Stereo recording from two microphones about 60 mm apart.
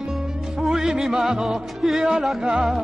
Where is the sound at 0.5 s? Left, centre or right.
Centre.